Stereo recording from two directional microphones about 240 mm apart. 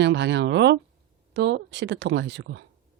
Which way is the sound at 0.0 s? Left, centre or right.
Right.